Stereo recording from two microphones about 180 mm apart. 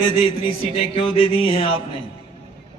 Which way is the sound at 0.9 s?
30° left (ahead or behind).